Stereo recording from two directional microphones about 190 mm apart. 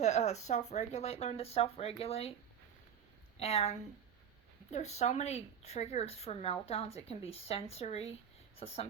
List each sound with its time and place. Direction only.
0.0 s a woman's voice: 35° left (ahead or behind)
3.3 s a woman's voice: 35° left (ahead or behind)